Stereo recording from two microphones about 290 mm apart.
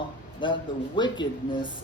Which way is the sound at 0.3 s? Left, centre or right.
Centre.